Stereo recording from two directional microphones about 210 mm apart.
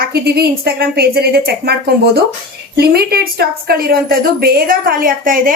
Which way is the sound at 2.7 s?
50° right (ahead or behind).